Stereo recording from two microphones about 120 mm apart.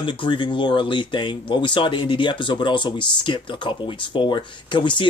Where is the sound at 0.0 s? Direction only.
40° left (ahead or behind).